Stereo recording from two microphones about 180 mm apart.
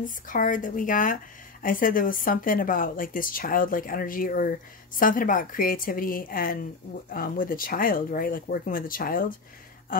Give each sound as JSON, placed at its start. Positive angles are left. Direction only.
{"t": 0.0, "sound": "a woman's voice", "side_deg": 50}